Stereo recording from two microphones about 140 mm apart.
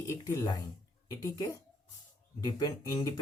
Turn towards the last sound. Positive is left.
turn(degrees=30)  # may be behind; listen again after turning